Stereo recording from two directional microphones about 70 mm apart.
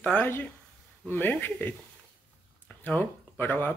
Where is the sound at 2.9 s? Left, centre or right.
Left.